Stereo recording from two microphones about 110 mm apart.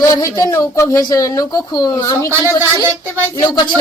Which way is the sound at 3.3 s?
40° left (ahead or behind).